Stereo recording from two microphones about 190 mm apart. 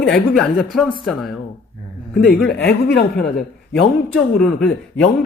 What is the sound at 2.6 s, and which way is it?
Speech, 65° left (ahead or behind).